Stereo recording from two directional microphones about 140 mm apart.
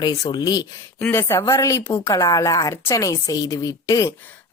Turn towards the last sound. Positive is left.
turn(degrees=25)  # may be behind; listen again after turning